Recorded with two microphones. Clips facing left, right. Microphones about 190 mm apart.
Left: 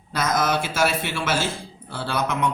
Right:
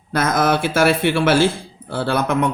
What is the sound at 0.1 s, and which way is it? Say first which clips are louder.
Speech: right 5 dB; 55° right (ahead or behind).